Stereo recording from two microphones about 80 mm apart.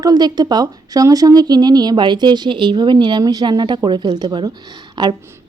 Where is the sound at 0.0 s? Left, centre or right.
Right.